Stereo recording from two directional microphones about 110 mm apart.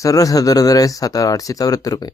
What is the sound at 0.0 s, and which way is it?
Speech, 30° left (ahead or behind).